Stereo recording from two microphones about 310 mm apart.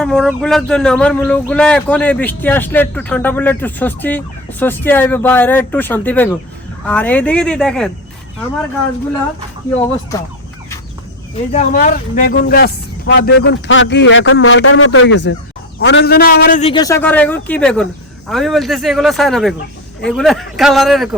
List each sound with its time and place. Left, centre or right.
0.0 s a man's voice: centre
11.5 s a man's voice: left; by 21.2 s centre